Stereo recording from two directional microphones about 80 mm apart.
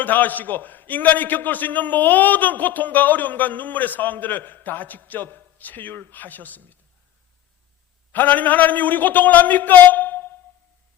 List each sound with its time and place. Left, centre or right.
0.0 s a man's voice: left
8.1 s a man's voice: left